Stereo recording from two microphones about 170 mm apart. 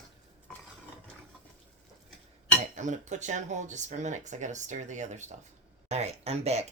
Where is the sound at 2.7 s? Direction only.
45° right (ahead or behind).